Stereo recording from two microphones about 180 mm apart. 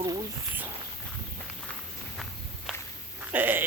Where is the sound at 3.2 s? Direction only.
10° right (ahead or behind).